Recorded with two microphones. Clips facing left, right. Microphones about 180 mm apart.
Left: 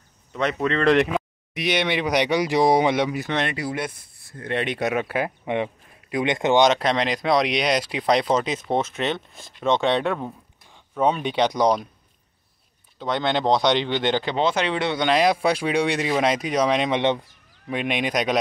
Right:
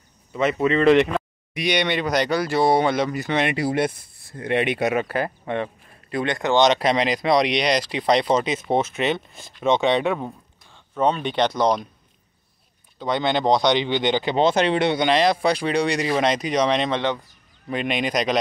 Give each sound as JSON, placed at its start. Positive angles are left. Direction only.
{"t": 0.3, "sound": "speech", "side_deg": -5}
{"t": 3.5, "sound": "speech", "side_deg": -30}
{"t": 4.4, "sound": "speech", "side_deg": -10}
{"t": 6.8, "sound": "speech", "side_deg": -5}
{"t": 10.7, "sound": "speech", "side_deg": 10}
{"t": 13.0, "sound": "speech", "side_deg": 0}
{"t": 14.4, "sound": "speech", "side_deg": -40}
{"t": 15.1, "sound": "speech", "side_deg": 5}
{"t": 17.0, "sound": "speech", "side_deg": 25}
{"t": 17.6, "sound": "speech", "side_deg": 0}